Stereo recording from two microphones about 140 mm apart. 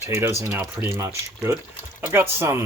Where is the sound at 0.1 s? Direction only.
15° right (ahead or behind).